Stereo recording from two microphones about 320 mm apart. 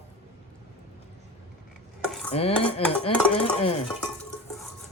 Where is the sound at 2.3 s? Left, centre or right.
Centre.